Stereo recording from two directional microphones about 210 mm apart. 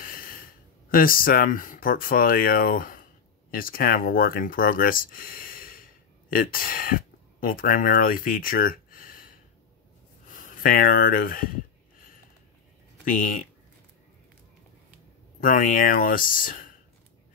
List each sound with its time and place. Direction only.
0.0 s speech: 45° left (ahead or behind)
10.3 s speech: 40° left (ahead or behind)
13.0 s speech: 40° left (ahead or behind)
15.4 s speech: 40° left (ahead or behind)